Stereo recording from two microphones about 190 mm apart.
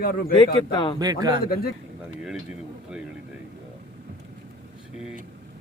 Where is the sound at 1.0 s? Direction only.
20° right (ahead or behind).